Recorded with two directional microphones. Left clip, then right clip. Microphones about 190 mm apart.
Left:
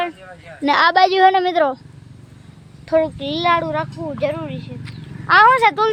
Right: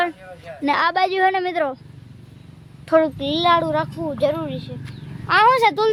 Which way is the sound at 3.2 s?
15° right (ahead or behind).